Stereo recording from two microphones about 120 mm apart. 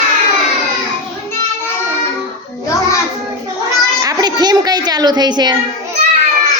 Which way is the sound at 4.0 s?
30° right (ahead or behind).